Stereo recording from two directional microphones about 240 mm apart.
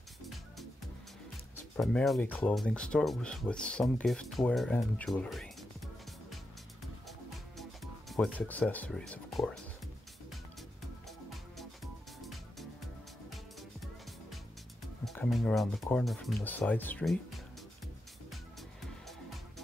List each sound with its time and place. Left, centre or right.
1.8 s speech: centre
7.1 s music: centre
11.1 s music: centre
15.0 s speech: centre